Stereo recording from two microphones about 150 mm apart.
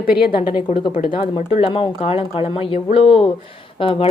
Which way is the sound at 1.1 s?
40° left (ahead or behind).